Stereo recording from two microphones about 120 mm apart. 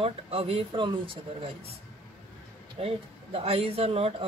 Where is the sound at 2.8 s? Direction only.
50° right (ahead or behind).